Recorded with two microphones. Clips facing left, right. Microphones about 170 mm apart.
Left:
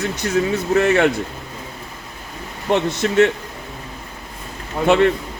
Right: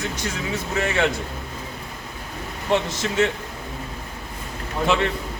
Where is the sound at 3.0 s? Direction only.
55° left (ahead or behind).